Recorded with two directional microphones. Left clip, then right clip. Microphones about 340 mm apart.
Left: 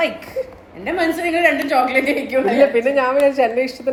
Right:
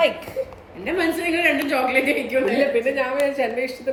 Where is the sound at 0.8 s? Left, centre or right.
Centre.